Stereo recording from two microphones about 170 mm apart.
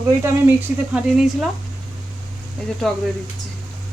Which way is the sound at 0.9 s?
5° right (ahead or behind).